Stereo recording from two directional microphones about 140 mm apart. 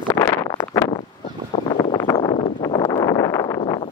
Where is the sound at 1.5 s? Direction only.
45° left (ahead or behind).